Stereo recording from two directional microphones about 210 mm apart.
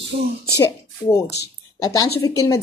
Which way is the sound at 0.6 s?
15° left (ahead or behind).